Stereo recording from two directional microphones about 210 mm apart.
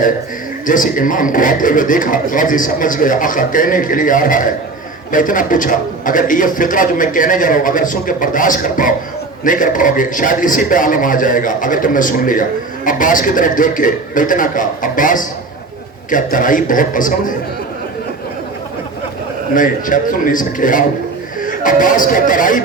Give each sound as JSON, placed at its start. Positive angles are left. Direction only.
{"t": 0.7, "sound": "a man's voice", "side_deg": 40}
{"t": 19.5, "sound": "a man's voice", "side_deg": 40}